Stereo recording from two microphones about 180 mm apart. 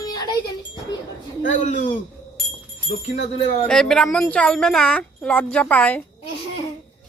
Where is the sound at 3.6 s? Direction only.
5° left (ahead or behind).